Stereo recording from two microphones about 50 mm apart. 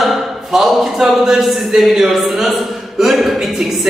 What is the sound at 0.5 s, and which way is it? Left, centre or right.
Speech, centre.